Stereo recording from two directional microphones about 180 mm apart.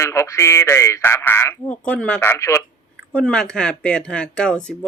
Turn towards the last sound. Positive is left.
turn(degrees=5)  # may be behind; listen again after turning